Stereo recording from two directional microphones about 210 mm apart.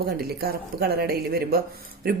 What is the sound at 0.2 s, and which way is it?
Speech, 50° right (ahead or behind).